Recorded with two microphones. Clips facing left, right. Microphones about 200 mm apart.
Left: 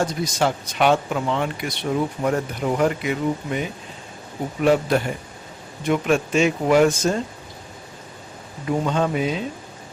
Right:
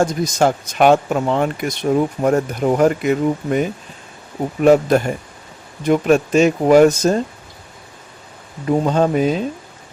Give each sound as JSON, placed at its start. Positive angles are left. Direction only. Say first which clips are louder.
{"t": 0.0, "sound": "speech", "louder": "right 6 dB", "side_deg": -45}
{"t": 8.6, "sound": "speech", "louder": "right 6 dB", "side_deg": -40}